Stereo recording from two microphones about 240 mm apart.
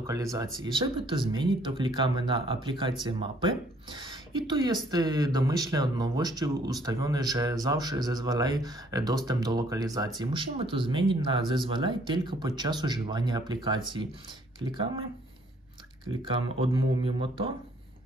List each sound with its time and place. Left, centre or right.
0.0 s speech: centre
16.3 s speech: right